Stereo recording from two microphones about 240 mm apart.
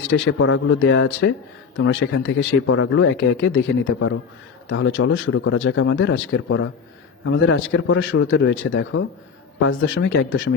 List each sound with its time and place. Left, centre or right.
0.1 s speech: left